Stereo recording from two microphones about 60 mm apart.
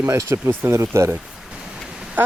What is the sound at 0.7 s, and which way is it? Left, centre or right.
Speech, right.